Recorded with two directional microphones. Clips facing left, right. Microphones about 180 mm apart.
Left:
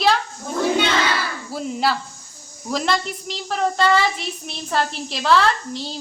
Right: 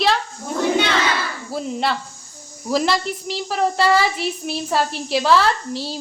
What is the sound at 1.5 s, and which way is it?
Child singing, centre (ahead or behind).